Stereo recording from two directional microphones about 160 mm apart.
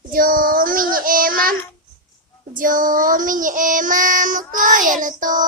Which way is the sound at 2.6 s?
60° right (ahead or behind).